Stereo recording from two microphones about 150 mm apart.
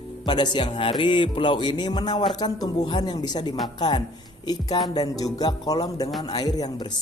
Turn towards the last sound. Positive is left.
turn(degrees=25)  # may be behind; listen again after turning